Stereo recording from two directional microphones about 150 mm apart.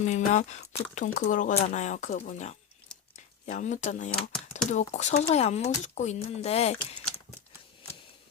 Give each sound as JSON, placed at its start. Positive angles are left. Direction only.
{"t": 0.0, "sound": "speech", "side_deg": 50}